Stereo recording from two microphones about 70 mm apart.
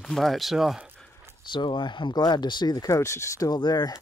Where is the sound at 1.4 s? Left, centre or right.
Left.